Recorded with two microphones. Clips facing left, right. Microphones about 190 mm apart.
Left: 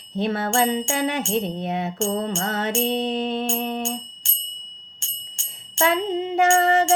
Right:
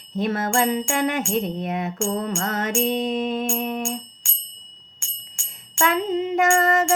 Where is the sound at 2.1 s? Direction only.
25° left (ahead or behind).